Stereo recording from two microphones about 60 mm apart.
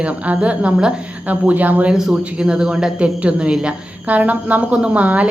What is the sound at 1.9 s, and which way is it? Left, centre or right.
A woman's voice, centre.